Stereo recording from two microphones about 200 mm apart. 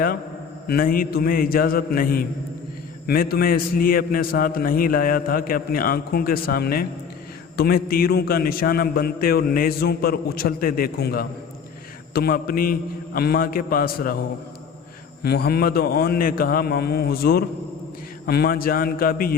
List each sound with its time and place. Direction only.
0.7 s a man's voice: 45° left (ahead or behind)
15.2 s a man's voice: 50° left (ahead or behind)